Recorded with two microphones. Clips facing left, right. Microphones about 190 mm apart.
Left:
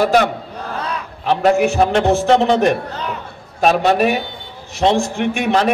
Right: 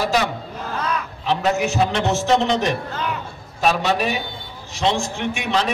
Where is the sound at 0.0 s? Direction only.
55° left (ahead or behind).